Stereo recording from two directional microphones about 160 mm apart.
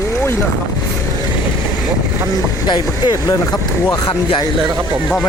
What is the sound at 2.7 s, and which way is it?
Speech, 30° left (ahead or behind).